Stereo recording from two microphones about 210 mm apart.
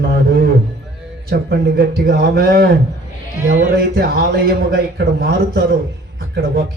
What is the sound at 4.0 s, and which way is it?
A man's voice, 45° right (ahead or behind).